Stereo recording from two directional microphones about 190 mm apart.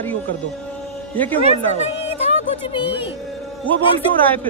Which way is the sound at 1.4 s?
35° left (ahead or behind).